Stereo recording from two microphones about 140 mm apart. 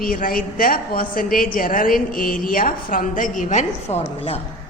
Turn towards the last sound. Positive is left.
turn(degrees=45)  # may be behind; listen again after turning